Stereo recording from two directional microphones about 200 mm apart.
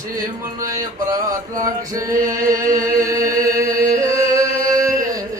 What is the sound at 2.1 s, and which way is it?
Chant, 45° right (ahead or behind).